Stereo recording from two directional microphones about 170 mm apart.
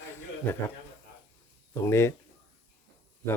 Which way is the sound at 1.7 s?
15° left (ahead or behind).